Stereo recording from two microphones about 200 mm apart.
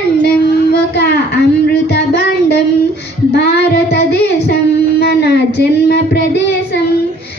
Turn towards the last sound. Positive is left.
turn(degrees=55)  # may be behind; listen again after turning